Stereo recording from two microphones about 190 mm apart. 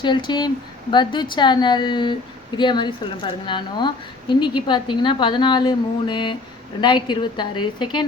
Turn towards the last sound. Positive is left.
turn(degrees=25)  # may be behind; listen again after turning